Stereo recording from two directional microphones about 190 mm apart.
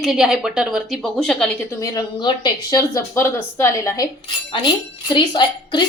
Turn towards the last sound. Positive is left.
turn(degrees=25)  # may be behind; listen again after turning